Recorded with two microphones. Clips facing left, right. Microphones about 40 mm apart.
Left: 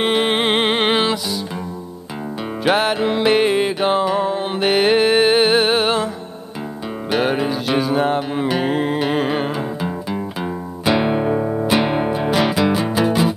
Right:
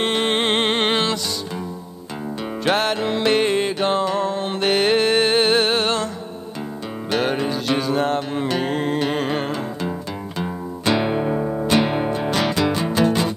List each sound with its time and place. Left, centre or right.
0.0 s music: centre
2.6 s music: centre
7.1 s music: centre